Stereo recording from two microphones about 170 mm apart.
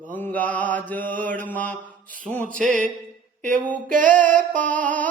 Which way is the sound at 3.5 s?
10° left (ahead or behind).